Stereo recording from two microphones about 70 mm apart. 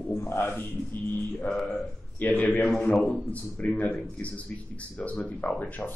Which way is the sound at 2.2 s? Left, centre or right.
Left.